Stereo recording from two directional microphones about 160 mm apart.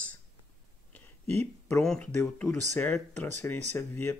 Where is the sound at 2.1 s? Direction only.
15° left (ahead or behind).